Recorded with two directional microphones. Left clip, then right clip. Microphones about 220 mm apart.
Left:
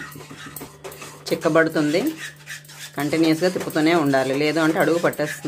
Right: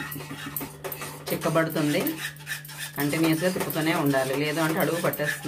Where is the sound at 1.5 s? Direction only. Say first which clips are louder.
Left 6 dB; 55° left (ahead or behind).